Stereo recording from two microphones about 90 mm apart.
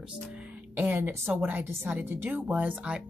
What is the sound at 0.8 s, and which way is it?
Speech, 25° right (ahead or behind).